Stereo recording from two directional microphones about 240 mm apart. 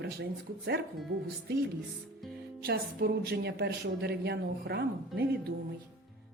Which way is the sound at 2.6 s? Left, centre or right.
Right.